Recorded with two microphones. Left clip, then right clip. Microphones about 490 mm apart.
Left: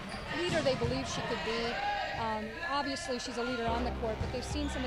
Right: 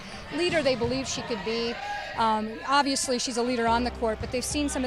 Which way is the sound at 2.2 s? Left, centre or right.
Right.